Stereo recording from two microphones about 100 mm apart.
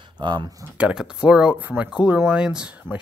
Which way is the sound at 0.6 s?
15° right (ahead or behind).